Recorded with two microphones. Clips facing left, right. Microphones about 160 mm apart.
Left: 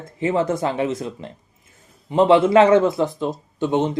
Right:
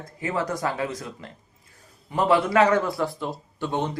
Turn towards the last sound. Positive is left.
turn(degrees=20)  # may be behind; listen again after turning